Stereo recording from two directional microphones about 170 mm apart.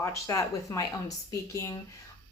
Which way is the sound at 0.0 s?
15° left (ahead or behind).